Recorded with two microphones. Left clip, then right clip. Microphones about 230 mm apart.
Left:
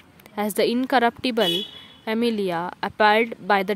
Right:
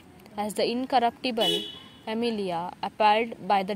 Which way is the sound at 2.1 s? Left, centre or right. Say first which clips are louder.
Left 5 dB; left.